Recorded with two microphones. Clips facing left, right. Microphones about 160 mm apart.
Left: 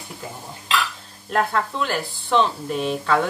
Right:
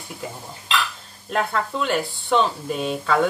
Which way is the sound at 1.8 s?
Centre (ahead or behind).